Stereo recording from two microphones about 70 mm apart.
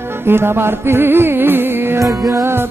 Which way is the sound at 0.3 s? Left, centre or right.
Right.